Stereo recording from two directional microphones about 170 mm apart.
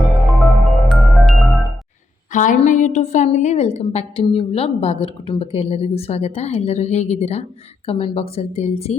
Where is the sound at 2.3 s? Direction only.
50° left (ahead or behind).